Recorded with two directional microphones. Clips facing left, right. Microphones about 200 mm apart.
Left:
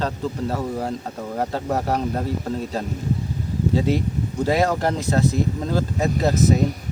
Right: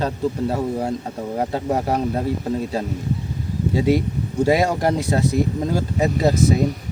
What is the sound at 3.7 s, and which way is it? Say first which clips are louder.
A man's voice: right 4 dB; 10° right (ahead or behind).